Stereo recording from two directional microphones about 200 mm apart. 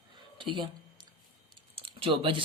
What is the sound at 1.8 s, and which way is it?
Speech, 25° right (ahead or behind).